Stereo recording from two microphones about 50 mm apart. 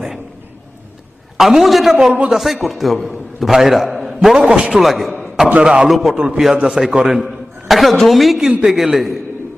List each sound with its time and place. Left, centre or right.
1.4 s a man's voice: centre
4.4 s a man's voice: right
4.8 s a man's voice: centre
5.6 s a man's voice: centre
5.9 s a man's voice: centre
6.1 s a man's voice: centre